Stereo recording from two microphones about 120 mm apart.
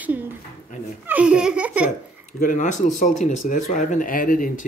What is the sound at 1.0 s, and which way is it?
Laughter, 10° right (ahead or behind).